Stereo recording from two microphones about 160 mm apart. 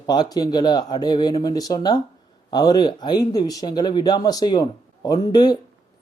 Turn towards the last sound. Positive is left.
turn(degrees=25)  # may be behind; listen again after turning